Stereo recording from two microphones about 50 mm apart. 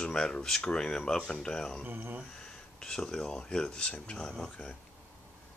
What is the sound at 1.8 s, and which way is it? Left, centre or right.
Speech, right.